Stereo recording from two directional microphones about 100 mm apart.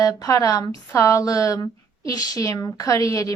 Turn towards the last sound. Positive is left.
turn(degrees=30)  # may be behind; listen again after turning